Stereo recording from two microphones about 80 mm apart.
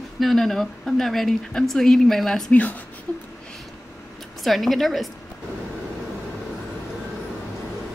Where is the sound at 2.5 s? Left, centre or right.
Centre.